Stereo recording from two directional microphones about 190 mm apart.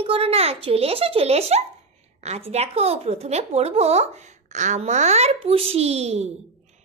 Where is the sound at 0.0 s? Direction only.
30° right (ahead or behind).